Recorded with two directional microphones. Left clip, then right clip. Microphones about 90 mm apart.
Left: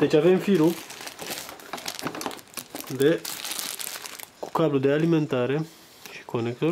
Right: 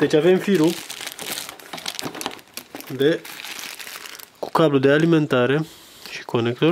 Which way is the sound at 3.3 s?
30° left (ahead or behind).